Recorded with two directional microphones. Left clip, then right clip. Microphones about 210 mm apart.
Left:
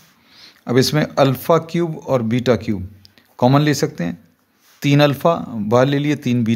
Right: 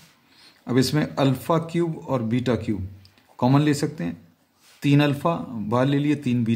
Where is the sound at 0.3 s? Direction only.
40° left (ahead or behind).